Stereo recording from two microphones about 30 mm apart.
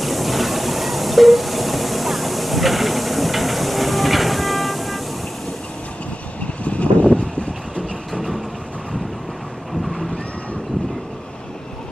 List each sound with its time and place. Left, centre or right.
0.0 s train: centre
6.6 s vehicle: left
8.1 s vehicle: centre